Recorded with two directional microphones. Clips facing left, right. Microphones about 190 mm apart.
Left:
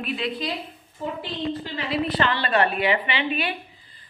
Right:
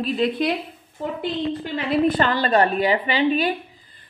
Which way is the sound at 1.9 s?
45° right (ahead or behind).